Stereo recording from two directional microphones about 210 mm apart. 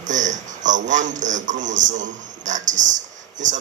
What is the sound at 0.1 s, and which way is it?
A man's voice, 35° right (ahead or behind).